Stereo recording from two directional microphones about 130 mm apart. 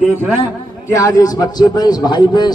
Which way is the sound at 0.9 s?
25° left (ahead or behind).